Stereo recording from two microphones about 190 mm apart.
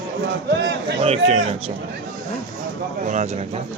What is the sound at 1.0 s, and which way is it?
Speech, 30° right (ahead or behind).